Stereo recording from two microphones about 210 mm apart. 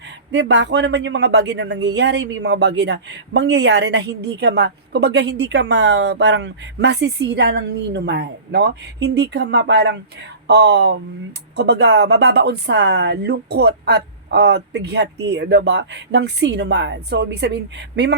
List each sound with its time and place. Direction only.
0.3 s speech: 55° right (ahead or behind)